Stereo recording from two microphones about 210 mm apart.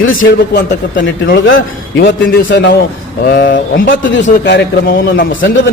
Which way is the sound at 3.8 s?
60° left (ahead or behind).